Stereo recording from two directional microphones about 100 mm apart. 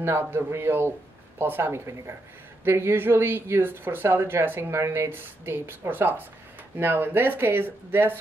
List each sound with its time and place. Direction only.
0.0 s speech: 25° right (ahead or behind)